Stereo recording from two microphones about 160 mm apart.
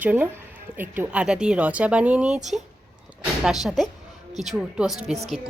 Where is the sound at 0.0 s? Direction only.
10° right (ahead or behind).